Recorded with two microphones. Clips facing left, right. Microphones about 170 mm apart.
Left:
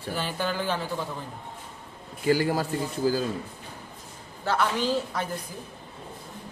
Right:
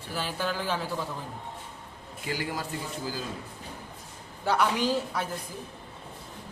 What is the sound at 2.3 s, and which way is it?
Speech, 40° left (ahead or behind).